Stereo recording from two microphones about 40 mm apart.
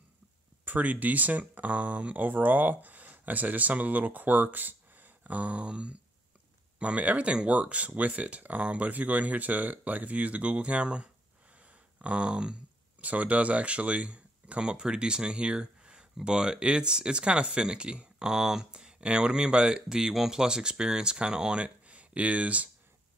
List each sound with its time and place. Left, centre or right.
0.7 s speech: right
11.5 s a sound: right
13.0 s speech: right